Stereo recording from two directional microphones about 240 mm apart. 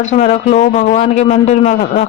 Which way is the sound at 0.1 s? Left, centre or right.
Left.